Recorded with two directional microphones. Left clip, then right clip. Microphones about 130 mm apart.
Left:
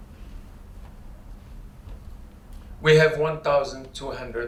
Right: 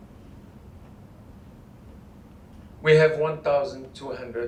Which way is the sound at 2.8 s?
35° left (ahead or behind).